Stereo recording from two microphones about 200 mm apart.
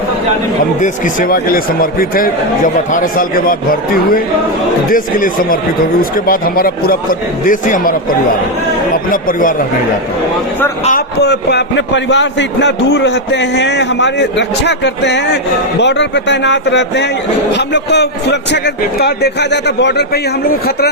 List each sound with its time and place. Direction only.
0.8 s a man's voice: 40° left (ahead or behind)
9.0 s a man's voice: 45° left (ahead or behind)
11.2 s a man's voice: 55° left (ahead or behind)